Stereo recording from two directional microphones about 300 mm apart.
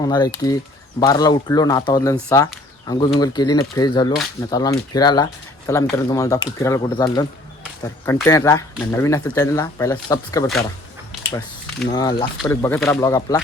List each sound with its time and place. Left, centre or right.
0.0 s speech: centre
2.3 s a sound: centre
3.2 s speech: centre
11.9 s speech: centre